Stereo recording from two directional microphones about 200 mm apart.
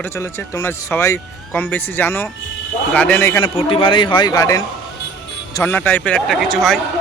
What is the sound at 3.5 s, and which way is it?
A man's voice, 25° left (ahead or behind).